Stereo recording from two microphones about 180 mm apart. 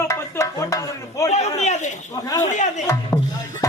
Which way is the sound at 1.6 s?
40° left (ahead or behind).